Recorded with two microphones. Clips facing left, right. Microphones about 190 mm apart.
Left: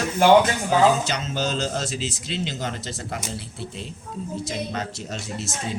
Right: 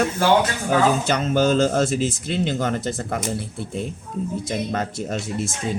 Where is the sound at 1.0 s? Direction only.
55° right (ahead or behind).